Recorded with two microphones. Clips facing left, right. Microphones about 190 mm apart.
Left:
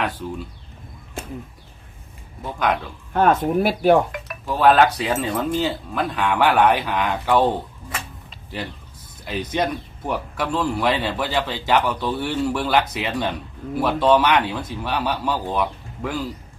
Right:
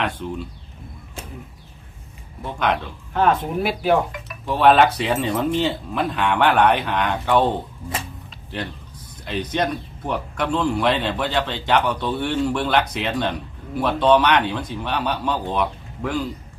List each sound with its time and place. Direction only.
0.0 s speech: centre (ahead or behind)
2.4 s speech: centre (ahead or behind)
3.1 s speech: 45° left (ahead or behind)
4.4 s speech: centre (ahead or behind)
9.2 s speech: 5° left (ahead or behind)